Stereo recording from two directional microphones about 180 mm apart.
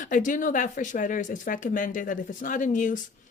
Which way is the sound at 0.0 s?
45° left (ahead or behind).